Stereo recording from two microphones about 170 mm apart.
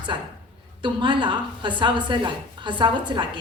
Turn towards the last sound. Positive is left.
turn(degrees=-30)  # may be behind; listen again after turning